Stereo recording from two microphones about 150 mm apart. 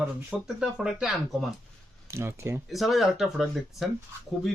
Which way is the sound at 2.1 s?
15° right (ahead or behind).